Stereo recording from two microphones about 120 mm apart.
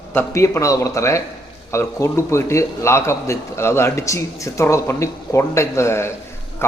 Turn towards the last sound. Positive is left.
turn(degrees=20)  # may be behind; listen again after turning